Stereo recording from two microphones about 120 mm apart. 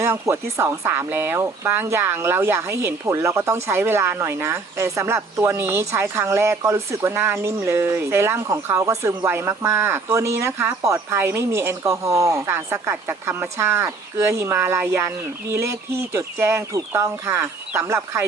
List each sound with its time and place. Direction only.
0.0 s speech: 25° right (ahead or behind)